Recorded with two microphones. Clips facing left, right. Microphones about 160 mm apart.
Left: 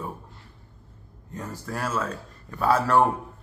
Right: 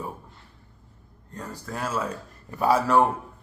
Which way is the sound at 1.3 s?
5° left (ahead or behind).